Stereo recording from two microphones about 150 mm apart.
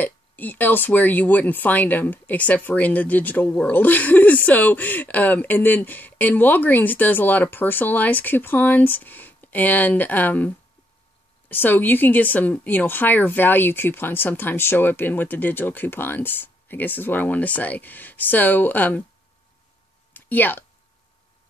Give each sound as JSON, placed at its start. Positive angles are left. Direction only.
{"t": 0.0, "sound": "speech", "side_deg": 10}
{"t": 20.2, "sound": "speech", "side_deg": 10}